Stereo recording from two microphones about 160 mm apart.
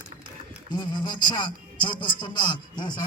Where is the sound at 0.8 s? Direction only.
25° left (ahead or behind).